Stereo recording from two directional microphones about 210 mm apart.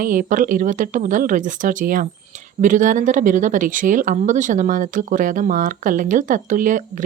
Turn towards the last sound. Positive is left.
turn(degrees=-40)  # may be behind; listen again after turning